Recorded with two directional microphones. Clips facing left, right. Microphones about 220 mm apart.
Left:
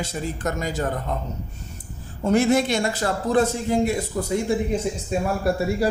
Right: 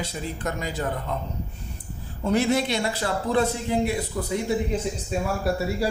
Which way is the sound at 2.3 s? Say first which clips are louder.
Left 3 dB; 45° left (ahead or behind).